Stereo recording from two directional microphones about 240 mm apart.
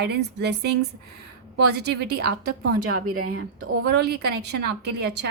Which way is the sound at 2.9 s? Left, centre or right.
Right.